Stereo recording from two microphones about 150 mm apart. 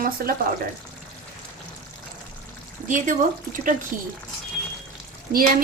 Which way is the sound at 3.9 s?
65° right (ahead or behind).